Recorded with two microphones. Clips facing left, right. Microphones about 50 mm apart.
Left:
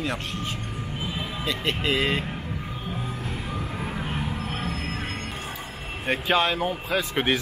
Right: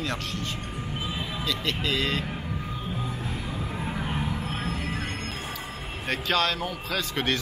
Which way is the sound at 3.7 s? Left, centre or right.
Centre.